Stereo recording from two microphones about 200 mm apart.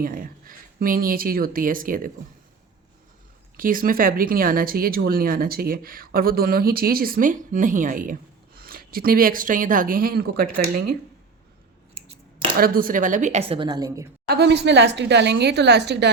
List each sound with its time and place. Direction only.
0.0 s speech: 45° right (ahead or behind)
3.6 s speech: 45° right (ahead or behind)
12.0 s scissors: 30° right (ahead or behind)
12.5 s speech: 45° right (ahead or behind)
13.5 s a woman's voice: 20° right (ahead or behind)
14.3 s a woman's voice: 55° right (ahead or behind)